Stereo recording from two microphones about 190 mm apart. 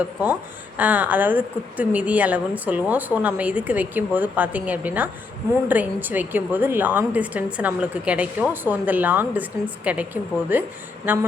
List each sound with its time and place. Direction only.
0.0 s a woman's voice: 10° right (ahead or behind)